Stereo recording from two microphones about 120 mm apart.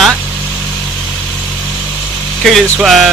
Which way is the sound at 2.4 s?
Centre (ahead or behind).